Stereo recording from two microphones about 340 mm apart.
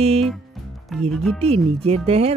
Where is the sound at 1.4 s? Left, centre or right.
Centre.